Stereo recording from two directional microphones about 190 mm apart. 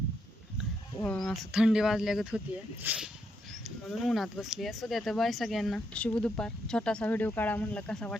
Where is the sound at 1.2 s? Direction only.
Centre (ahead or behind).